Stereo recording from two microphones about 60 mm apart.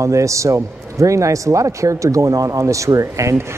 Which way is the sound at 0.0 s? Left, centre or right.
Right.